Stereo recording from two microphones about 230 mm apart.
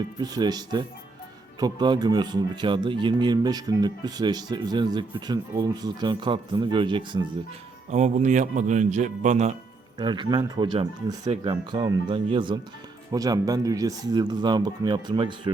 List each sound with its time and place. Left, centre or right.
0.2 s speech: centre
10.0 s speech: centre